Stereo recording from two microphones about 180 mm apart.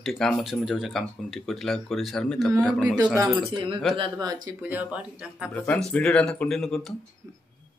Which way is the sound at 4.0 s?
20° right (ahead or behind).